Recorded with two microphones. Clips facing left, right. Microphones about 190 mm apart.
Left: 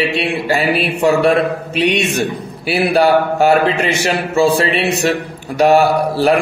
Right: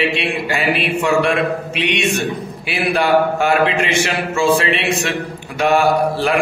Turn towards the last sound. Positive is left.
turn(degrees=35)  # may be behind; listen again after turning